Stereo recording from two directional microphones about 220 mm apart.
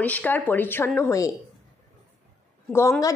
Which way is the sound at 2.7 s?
10° left (ahead or behind).